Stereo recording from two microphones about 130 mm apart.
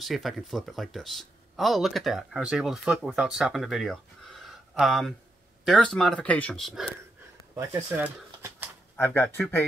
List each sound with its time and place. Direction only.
0.0 s speech: centre (ahead or behind)
7.5 s speech: 20° right (ahead or behind)
8.9 s speech: 15° left (ahead or behind)